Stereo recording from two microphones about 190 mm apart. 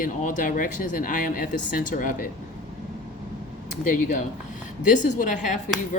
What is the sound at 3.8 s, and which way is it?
Speech, 45° left (ahead or behind).